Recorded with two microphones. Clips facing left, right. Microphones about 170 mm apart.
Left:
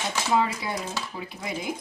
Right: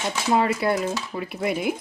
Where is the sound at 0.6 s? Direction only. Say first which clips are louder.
Right 8 dB; 60° right (ahead or behind).